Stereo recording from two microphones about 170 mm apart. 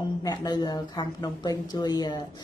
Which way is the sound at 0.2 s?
25° left (ahead or behind).